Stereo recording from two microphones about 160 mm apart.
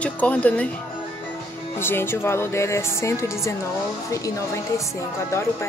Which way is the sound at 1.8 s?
15° left (ahead or behind).